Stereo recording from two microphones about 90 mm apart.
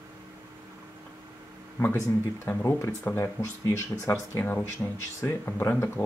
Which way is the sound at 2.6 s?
35° left (ahead or behind).